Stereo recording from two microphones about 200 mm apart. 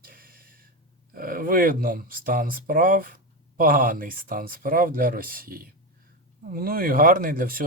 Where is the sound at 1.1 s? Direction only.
45° right (ahead or behind).